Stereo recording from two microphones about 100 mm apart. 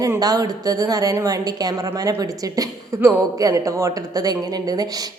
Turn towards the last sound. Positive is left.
turn(degrees=-40)  # may be behind; listen again after turning